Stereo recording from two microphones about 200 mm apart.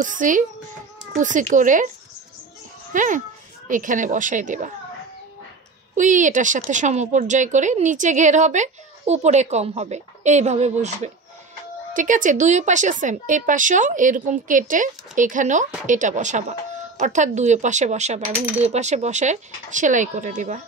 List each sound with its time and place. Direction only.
0.0 s speech: 40° right (ahead or behind)
2.9 s a child's voice: 40° right (ahead or behind)
5.9 s speech: 40° right (ahead or behind)
11.9 s speech: 40° right (ahead or behind)